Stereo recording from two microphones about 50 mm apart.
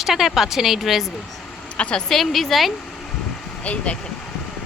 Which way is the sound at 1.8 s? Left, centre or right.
Left.